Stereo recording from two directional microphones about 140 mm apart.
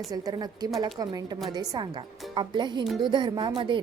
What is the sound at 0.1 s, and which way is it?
A woman's voice, 30° right (ahead or behind).